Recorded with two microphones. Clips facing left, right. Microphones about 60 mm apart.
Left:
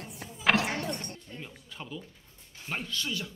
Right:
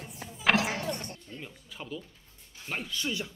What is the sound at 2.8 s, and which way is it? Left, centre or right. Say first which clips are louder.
Speech: right 1 dB; centre.